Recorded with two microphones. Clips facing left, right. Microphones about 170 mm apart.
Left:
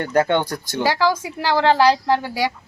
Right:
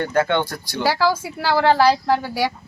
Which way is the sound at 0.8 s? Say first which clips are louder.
Even; 15° left (ahead or behind).